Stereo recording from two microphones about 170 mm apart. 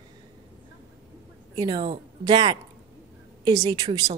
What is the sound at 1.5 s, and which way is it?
A woman's voice, 25° right (ahead or behind).